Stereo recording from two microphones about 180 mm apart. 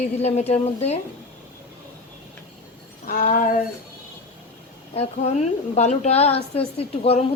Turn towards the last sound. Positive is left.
turn(degrees=35)  # may be behind; listen again after turning